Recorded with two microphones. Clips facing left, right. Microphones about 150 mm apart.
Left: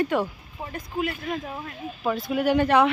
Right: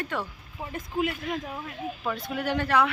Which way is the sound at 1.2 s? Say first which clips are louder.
Left 2 dB; 5° left (ahead or behind).